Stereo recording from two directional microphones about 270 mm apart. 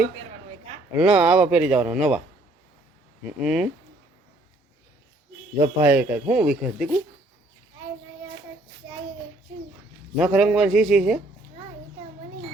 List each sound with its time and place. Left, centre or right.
0.9 s speech: centre
3.4 s speech: centre
5.5 s speech: centre
10.2 s speech: centre